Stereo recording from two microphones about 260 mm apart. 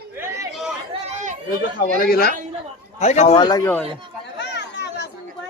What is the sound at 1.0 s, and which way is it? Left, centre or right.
Chatter, right.